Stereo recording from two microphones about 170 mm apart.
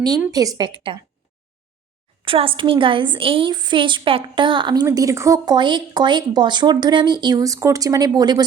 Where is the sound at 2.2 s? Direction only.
30° right (ahead or behind).